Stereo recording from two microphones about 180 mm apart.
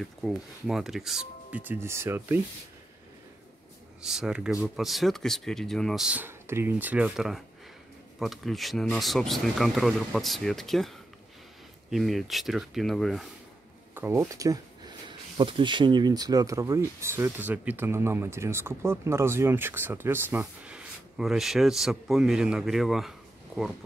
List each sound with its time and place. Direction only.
0.0 s speech: centre (ahead or behind)
4.0 s speech: 5° right (ahead or behind)
13.9 s speech: 15° right (ahead or behind)